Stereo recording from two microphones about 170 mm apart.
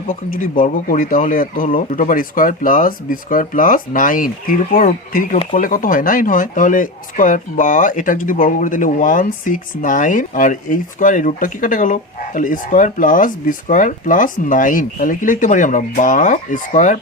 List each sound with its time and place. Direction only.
0.1 s speech: 55° left (ahead or behind)